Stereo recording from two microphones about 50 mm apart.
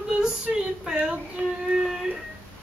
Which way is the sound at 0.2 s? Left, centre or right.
Centre.